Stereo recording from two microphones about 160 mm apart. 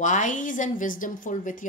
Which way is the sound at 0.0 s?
50° left (ahead or behind).